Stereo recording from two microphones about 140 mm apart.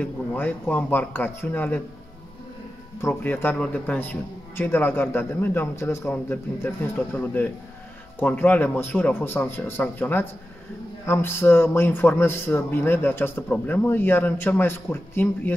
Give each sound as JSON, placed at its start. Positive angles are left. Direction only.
{"t": 0.0, "sound": "a man's voice", "side_deg": 10}
{"t": 3.0, "sound": "a man's voice", "side_deg": 15}